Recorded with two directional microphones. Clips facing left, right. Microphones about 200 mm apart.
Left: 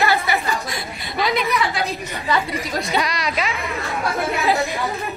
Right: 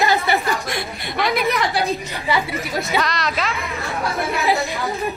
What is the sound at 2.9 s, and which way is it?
Snicker, 10° left (ahead or behind).